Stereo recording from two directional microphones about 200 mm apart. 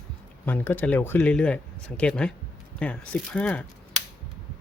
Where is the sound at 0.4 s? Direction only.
10° left (ahead or behind).